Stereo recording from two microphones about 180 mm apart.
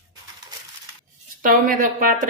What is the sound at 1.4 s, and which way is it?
Speech, 50° right (ahead or behind).